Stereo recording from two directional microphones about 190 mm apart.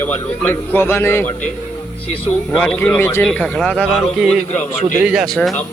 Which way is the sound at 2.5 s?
5° left (ahead or behind).